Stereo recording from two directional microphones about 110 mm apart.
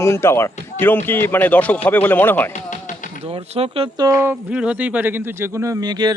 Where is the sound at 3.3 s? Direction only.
60° right (ahead or behind).